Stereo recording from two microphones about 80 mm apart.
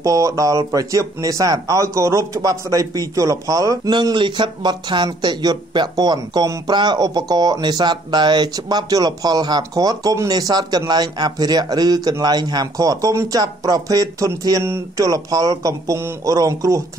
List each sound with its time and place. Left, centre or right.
0.0 s speech: right
3.9 s speech: right
13.4 s speech: right